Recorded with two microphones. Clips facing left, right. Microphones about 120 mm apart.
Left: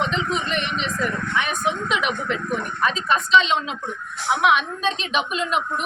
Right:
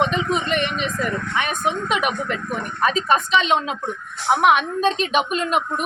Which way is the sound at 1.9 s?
50° right (ahead or behind).